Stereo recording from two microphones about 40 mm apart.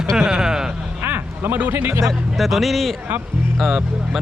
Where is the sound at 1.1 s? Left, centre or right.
Right.